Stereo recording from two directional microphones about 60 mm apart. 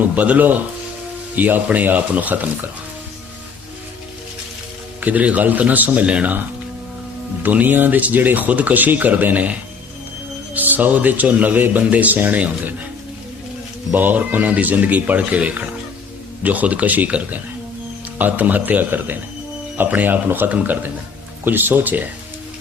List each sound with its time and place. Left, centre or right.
0.0 s speech: right
4.9 s speech: right
7.4 s speech: right
13.9 s speech: right